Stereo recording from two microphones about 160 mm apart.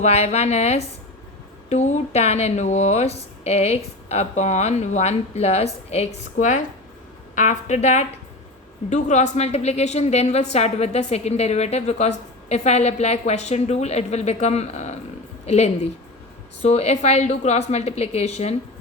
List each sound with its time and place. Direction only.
0.0 s a woman's voice: 45° left (ahead or behind)